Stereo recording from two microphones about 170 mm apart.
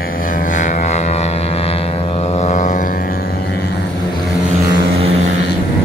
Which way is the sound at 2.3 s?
45° left (ahead or behind).